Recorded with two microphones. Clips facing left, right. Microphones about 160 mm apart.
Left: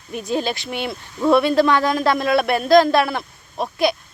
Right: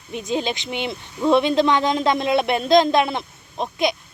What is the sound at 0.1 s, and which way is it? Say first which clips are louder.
Speech: left 1 dB; 20° right (ahead or behind).